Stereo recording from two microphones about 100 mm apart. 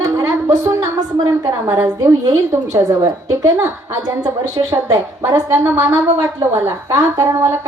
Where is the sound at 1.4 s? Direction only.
25° right (ahead or behind).